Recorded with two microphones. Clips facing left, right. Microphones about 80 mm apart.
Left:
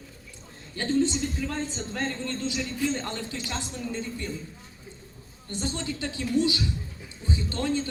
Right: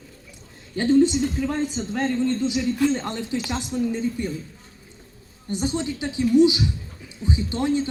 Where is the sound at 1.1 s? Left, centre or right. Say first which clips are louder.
Right 6 dB; centre.